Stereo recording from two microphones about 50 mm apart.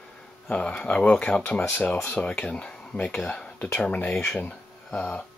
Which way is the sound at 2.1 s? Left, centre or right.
Left.